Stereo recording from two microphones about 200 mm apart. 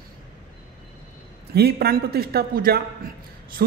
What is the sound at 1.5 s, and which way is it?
Speech, 50° right (ahead or behind).